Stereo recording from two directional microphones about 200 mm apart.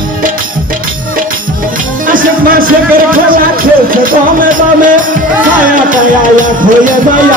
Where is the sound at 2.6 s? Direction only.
45° right (ahead or behind).